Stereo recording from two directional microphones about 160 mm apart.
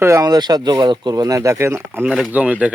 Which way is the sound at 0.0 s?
20° right (ahead or behind).